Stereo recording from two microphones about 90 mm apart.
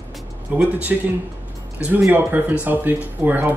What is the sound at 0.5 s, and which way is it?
Speech, 20° right (ahead or behind).